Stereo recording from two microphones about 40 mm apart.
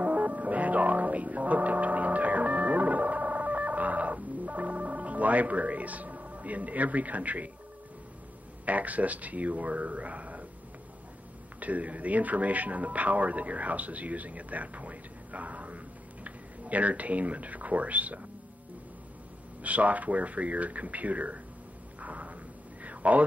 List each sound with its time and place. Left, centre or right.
0.0 s music: right
8.6 s speech: right
11.6 s speech: right
19.6 s speech: right
22.0 s a sound: right